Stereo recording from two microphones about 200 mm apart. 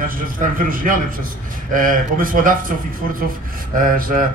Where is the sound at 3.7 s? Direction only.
45° right (ahead or behind).